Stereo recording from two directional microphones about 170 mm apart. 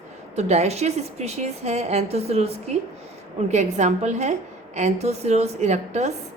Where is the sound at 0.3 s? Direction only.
40° right (ahead or behind).